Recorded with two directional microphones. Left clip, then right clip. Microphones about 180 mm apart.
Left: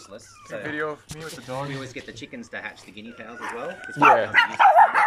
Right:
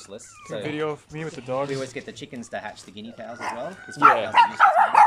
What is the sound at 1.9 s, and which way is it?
Speech, 45° right (ahead or behind).